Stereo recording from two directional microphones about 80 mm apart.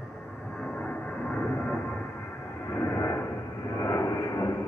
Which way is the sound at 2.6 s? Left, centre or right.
Left.